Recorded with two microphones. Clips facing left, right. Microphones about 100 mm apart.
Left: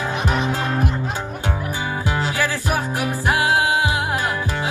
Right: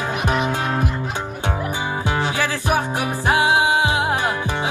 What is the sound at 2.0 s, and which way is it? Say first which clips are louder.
Music: even; 20° right (ahead or behind).